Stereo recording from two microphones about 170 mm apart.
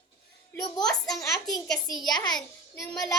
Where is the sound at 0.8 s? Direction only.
5° left (ahead or behind).